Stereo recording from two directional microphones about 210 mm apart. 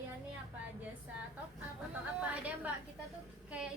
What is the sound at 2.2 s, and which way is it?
A woman's voice, 5° right (ahead or behind).